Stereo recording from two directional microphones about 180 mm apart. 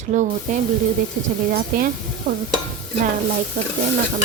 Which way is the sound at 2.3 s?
55° right (ahead or behind).